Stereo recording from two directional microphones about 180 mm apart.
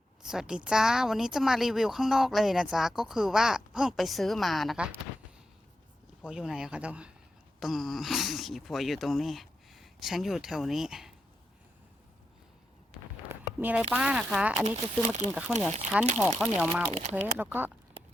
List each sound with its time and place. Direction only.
0.2 s a woman's voice: 5° right (ahead or behind)
6.2 s a woman's voice: 5° right (ahead or behind)
13.2 s a sound: 10° right (ahead or behind)
13.9 s a woman's voice: 5° right (ahead or behind)
15.0 s speech: 40° right (ahead or behind)
15.5 s a woman's voice: 5° right (ahead or behind)
16.9 s speech: 40° right (ahead or behind)
17.3 s speech: 10° right (ahead or behind)